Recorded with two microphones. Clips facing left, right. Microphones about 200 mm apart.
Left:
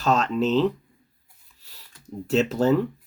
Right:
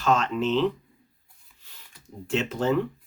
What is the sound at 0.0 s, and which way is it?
Speech, 40° left (ahead or behind).